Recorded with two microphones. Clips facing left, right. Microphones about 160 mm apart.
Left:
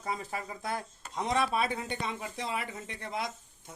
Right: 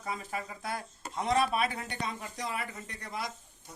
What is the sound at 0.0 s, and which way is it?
Speech, 25° left (ahead or behind).